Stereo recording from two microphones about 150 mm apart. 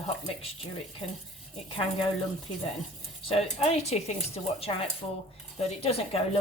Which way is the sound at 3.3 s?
45° left (ahead or behind).